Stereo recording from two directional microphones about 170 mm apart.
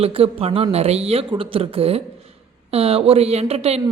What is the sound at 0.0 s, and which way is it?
Speech, 35° right (ahead or behind).